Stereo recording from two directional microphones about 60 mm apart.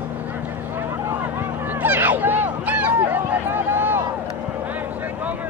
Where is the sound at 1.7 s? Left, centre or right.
Right.